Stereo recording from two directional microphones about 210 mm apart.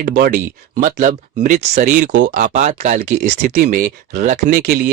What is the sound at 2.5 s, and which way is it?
Speech, 35° right (ahead or behind).